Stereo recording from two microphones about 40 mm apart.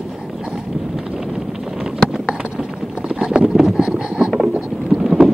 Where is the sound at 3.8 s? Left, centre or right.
Right.